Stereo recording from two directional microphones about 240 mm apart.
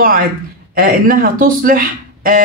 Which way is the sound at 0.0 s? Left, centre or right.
Right.